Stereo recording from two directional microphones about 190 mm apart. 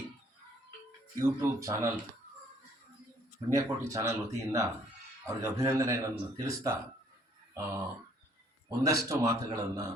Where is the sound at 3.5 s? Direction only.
15° right (ahead or behind).